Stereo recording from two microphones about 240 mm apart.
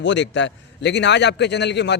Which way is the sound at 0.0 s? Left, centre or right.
Left.